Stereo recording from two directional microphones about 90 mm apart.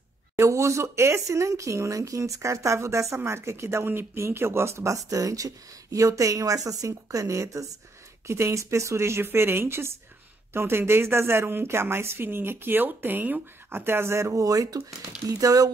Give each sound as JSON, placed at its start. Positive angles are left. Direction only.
{"t": 0.4, "sound": "a woman's voice", "side_deg": -35}